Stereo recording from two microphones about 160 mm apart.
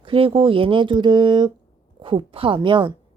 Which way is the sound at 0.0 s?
35° right (ahead or behind).